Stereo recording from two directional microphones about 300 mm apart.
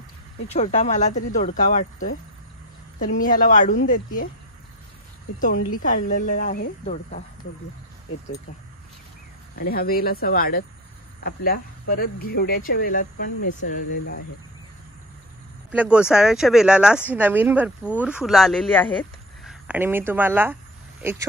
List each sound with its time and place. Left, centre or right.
0.5 s speech: left
5.7 s speech: left
9.6 s speech: left
15.7 s speech: centre